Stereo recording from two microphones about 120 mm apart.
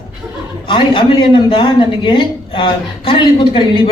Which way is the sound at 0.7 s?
45° left (ahead or behind).